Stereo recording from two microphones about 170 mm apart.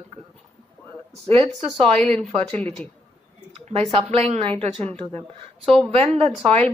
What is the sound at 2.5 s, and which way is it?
Speech, 10° left (ahead or behind).